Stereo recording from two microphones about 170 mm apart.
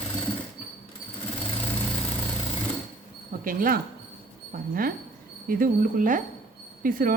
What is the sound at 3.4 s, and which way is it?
A woman's voice, 55° right (ahead or behind).